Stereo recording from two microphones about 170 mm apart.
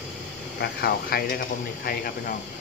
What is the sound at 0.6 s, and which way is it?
Speech, 65° left (ahead or behind).